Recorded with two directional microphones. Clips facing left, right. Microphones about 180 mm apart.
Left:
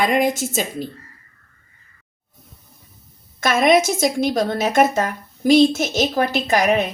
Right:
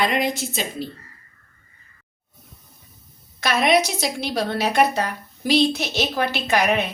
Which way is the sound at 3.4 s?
45° left (ahead or behind).